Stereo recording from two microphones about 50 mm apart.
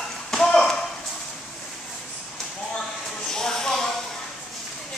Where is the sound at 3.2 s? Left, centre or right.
Centre.